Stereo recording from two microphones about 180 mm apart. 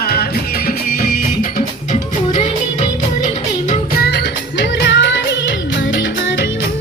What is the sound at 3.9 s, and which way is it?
Music, 70° left (ahead or behind).